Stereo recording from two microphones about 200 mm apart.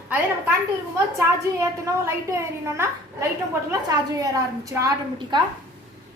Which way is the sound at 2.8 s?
10° right (ahead or behind).